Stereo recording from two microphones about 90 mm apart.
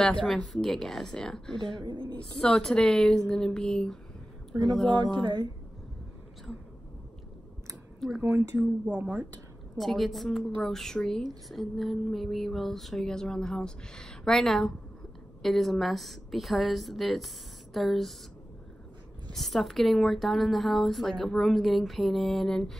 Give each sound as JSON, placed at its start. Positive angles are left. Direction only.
{"t": 0.0, "sound": "speech", "side_deg": 5}
{"t": 1.8, "sound": "speech", "side_deg": -60}
{"t": 2.1, "sound": "speech", "side_deg": 5}
{"t": 4.9, "sound": "speech", "side_deg": -60}
{"t": 8.2, "sound": "a woman's voice", "side_deg": -30}
{"t": 9.8, "sound": "speech", "side_deg": 0}
{"t": 19.3, "sound": "speech", "side_deg": 0}